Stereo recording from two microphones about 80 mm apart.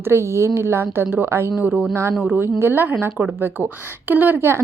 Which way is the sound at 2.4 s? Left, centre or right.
Right.